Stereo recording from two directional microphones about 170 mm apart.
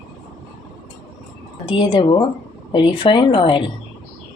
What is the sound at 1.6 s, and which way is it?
Speech, 30° left (ahead or behind).